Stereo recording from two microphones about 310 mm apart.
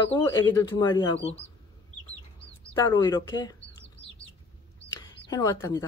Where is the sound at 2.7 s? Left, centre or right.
Centre.